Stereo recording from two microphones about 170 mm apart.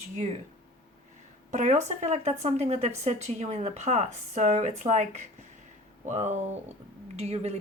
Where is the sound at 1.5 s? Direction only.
45° right (ahead or behind).